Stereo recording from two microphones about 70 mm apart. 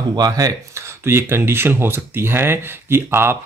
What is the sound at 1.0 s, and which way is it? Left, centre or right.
Speech, right.